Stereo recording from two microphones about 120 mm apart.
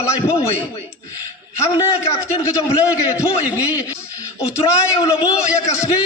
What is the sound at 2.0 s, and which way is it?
Speech, 25° left (ahead or behind).